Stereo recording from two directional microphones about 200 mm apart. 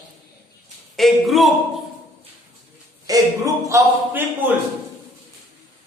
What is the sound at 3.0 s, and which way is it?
A man's voice, 15° right (ahead or behind).